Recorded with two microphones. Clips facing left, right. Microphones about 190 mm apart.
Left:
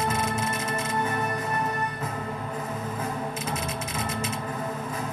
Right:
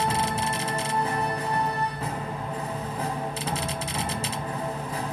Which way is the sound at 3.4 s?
35° right (ahead or behind).